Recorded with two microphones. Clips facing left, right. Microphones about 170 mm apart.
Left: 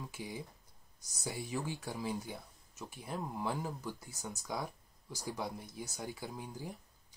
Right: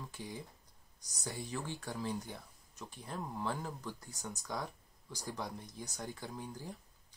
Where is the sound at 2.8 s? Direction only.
10° left (ahead or behind).